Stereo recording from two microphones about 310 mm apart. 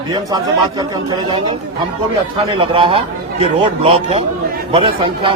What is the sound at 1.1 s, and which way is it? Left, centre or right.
Speech, centre.